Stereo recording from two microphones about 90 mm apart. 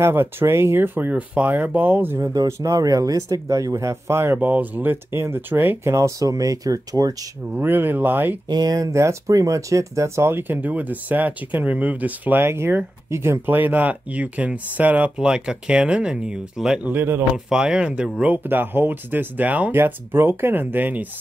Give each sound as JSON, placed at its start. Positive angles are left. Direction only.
{"t": 0.0, "sound": "speech", "side_deg": -25}
{"t": 2.1, "sound": "speech", "side_deg": -35}
{"t": 5.9, "sound": "speech", "side_deg": -35}
{"t": 7.5, "sound": "speech", "side_deg": -25}
{"t": 8.5, "sound": "speech", "side_deg": -50}
{"t": 16.8, "sound": "speech", "side_deg": -25}
{"t": 17.5, "sound": "speech", "side_deg": -10}